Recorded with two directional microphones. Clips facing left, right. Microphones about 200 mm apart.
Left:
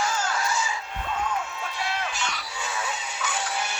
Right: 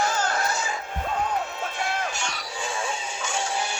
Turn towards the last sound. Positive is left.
turn(degrees=-30)  # may be behind; listen again after turning